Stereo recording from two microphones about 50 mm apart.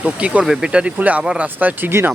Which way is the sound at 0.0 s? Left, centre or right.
Right.